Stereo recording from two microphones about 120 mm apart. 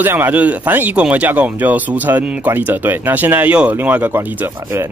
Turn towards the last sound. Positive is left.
turn(degrees=-15)  # may be behind; listen again after turning